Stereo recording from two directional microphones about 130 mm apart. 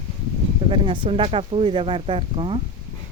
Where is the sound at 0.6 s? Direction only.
40° right (ahead or behind).